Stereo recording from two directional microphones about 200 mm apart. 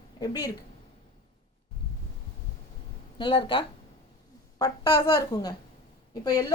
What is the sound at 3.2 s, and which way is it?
A woman's voice, 25° left (ahead or behind).